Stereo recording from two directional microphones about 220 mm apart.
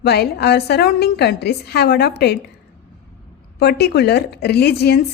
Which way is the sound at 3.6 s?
50° left (ahead or behind).